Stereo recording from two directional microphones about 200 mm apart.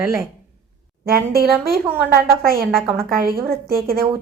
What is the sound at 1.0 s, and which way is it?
Speech, 50° right (ahead or behind).